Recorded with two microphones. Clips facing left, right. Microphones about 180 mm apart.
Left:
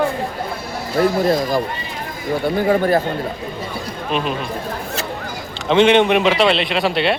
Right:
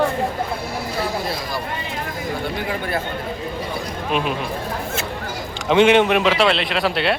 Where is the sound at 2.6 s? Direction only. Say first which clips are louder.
Left 12 dB; 40° left (ahead or behind).